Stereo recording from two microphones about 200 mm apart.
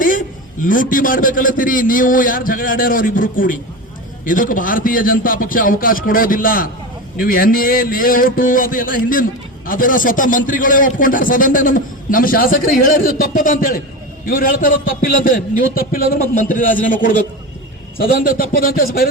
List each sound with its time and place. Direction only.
0.6 s a man's voice: 40° left (ahead or behind)